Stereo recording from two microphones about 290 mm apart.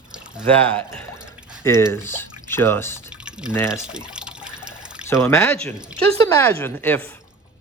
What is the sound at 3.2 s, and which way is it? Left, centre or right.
Drip, centre.